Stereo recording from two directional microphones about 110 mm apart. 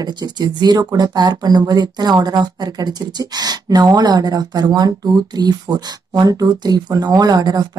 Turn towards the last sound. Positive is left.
turn(degrees=-35)  # may be behind; listen again after turning